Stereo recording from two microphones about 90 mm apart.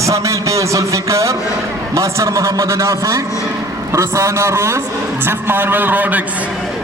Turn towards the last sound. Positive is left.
turn(degrees=-20)  # may be behind; listen again after turning